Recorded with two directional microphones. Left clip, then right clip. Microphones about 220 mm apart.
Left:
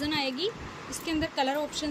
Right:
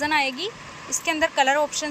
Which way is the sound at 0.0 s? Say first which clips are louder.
Right 7 dB; 5° left (ahead or behind).